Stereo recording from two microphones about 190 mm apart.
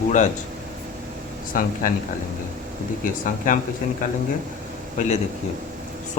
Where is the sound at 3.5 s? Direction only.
45° left (ahead or behind).